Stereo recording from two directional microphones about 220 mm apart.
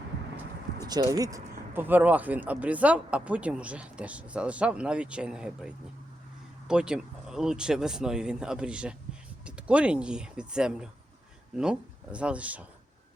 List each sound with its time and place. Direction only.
0.9 s speech: 15° right (ahead or behind)